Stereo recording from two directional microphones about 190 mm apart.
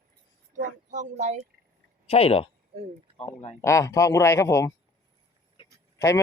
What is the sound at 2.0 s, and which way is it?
Speech, 30° left (ahead or behind).